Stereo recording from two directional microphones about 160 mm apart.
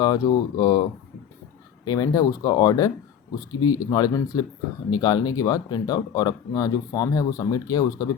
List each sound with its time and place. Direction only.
0.0 s speech: 25° left (ahead or behind)